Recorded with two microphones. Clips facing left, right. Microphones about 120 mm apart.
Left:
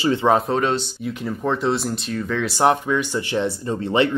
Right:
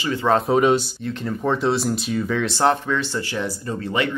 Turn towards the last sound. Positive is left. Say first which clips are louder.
# left 4 dB
turn(degrees=25)  # may be behind; listen again after turning